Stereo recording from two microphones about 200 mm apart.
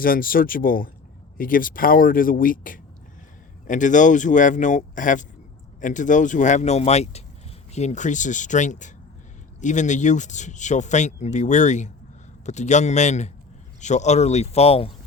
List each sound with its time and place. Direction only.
0.0 s speech: 45° left (ahead or behind); by 14.9 s 30° left (ahead or behind)